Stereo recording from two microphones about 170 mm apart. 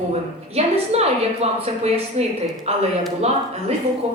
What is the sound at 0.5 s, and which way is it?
A woman's voice, 40° right (ahead or behind).